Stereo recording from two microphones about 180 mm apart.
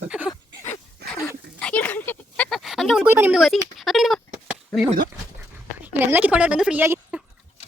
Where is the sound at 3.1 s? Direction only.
10° right (ahead or behind).